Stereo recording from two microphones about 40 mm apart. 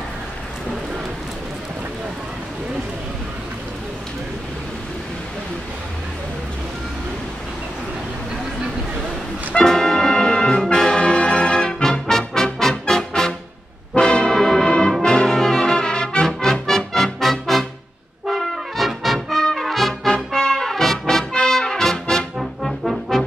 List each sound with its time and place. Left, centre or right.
9.6 s brass instrument: centre
12.5 s music: centre
13.9 s brass instrument: centre
16.3 s music: centre
18.2 s brass instrument: centre
21.1 s music: centre
22.6 s trombone: centre